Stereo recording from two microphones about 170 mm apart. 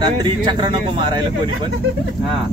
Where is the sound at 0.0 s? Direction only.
25° right (ahead or behind).